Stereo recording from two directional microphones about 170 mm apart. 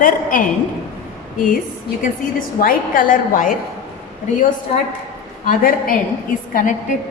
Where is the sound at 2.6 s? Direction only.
55° left (ahead or behind).